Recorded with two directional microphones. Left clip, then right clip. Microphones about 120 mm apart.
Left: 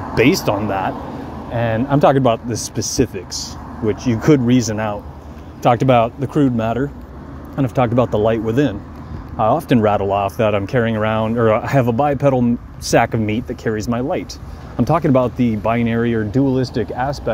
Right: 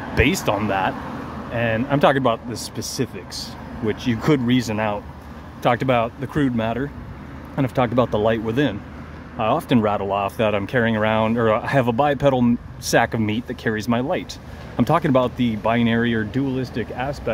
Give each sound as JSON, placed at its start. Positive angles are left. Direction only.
{"t": 0.2, "sound": "speech", "side_deg": 10}
{"t": 0.7, "sound": "speech", "side_deg": 0}
{"t": 3.8, "sound": "speech", "side_deg": -5}
{"t": 6.3, "sound": "speech", "side_deg": 0}
{"t": 9.8, "sound": "speech", "side_deg": 10}
{"t": 16.7, "sound": "speech", "side_deg": 10}